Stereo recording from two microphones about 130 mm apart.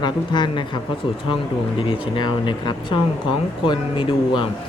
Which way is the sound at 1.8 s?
40° left (ahead or behind).